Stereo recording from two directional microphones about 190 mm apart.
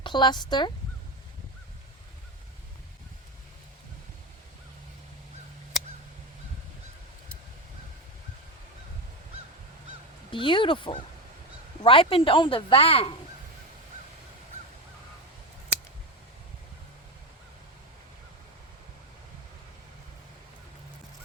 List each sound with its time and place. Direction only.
0.0 s speech: 25° left (ahead or behind)
10.3 s speech: 25° left (ahead or behind)